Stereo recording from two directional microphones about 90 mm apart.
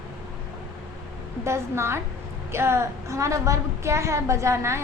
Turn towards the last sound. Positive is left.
turn(degrees=-30)  # may be behind; listen again after turning